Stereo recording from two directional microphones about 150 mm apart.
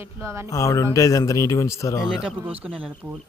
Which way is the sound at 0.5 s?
20° left (ahead or behind).